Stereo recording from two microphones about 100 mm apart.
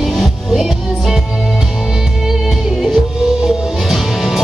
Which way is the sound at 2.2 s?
Centre (ahead or behind).